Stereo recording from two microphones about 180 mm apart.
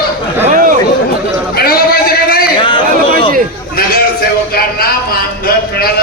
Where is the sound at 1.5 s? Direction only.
55° left (ahead or behind).